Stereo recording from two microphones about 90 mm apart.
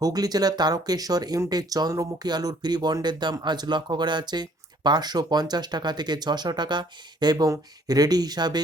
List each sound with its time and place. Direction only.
0.0 s speech: 45° right (ahead or behind)